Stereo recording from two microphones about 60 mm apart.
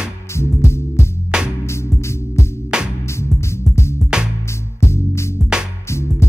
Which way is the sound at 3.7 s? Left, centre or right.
Left.